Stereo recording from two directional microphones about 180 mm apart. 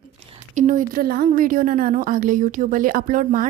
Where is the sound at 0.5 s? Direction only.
45° right (ahead or behind).